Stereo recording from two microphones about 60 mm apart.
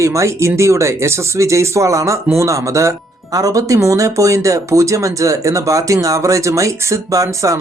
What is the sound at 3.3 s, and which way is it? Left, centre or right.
Speech, right.